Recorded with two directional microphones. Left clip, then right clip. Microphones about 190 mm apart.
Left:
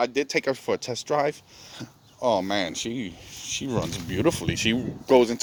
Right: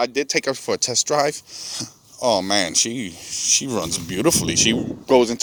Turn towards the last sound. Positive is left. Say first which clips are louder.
# right 3 dB
turn(degrees=-30)  # may be behind; listen again after turning